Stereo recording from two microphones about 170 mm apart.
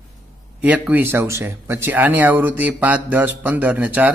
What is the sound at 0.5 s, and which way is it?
Speech, 10° right (ahead or behind).